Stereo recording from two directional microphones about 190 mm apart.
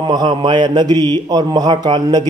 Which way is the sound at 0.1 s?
25° right (ahead or behind).